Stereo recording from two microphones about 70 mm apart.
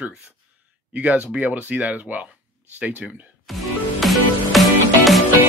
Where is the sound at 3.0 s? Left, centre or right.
Centre.